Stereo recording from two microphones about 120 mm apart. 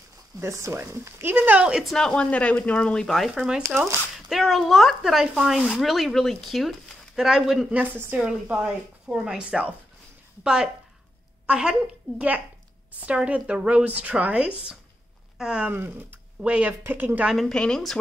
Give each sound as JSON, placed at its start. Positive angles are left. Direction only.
{"t": 0.4, "sound": "a woman's voice", "side_deg": -25}
{"t": 13.0, "sound": "speech", "side_deg": -10}
{"t": 17.3, "sound": "speech", "side_deg": 5}